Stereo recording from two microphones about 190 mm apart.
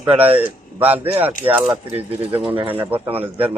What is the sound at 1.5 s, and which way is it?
Speech, 25° right (ahead or behind).